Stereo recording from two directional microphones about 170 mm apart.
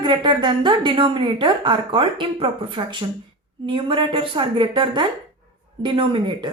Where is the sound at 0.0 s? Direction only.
25° right (ahead or behind).